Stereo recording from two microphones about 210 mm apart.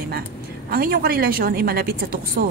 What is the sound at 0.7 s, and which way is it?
Speech, 45° right (ahead or behind).